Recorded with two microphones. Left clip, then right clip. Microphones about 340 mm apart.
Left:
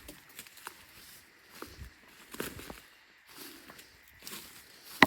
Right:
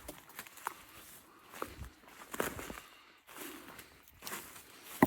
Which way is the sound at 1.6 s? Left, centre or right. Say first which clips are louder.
Right 4 dB; centre.